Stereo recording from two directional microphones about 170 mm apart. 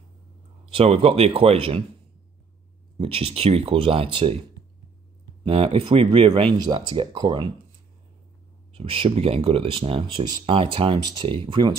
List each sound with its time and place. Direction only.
0.7 s speech: 35° right (ahead or behind)
3.0 s speech: 35° right (ahead or behind)
8.7 s speech: 30° right (ahead or behind)